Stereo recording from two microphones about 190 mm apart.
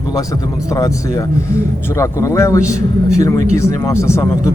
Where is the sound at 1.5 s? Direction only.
15° left (ahead or behind).